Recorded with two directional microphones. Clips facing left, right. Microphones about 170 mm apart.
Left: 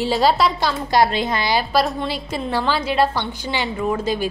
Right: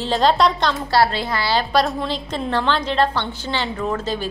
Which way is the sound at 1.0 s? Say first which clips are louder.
Left 1 dB; 20° left (ahead or behind).